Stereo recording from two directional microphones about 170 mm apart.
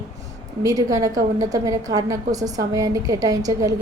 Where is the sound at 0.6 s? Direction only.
20° right (ahead or behind).